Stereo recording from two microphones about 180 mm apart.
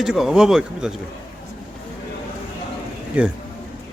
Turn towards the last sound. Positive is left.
turn(degrees=-5)  # may be behind; listen again after turning